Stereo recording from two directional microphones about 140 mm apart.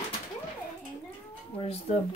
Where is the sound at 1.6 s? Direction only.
50° left (ahead or behind).